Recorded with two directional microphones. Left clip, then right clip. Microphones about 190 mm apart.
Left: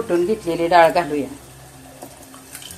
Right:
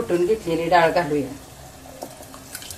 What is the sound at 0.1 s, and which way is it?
Speech, 50° left (ahead or behind).